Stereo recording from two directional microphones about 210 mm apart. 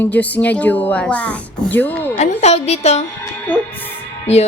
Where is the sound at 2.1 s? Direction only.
30° left (ahead or behind).